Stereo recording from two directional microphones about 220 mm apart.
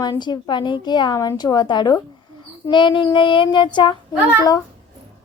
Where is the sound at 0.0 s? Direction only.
20° left (ahead or behind).